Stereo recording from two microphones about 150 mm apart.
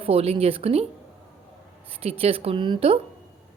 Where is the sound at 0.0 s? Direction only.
40° right (ahead or behind).